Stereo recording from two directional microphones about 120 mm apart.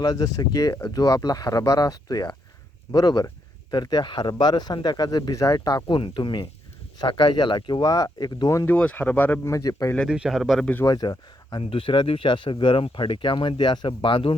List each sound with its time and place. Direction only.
0.0 s speech: 30° left (ahead or behind)
8.7 s speech: 10° left (ahead or behind); by 9.9 s 25° left (ahead or behind)
10.1 s speech: 5° right (ahead or behind)
10.8 s speech: 30° left (ahead or behind)
11.6 s speech: 50° left (ahead or behind)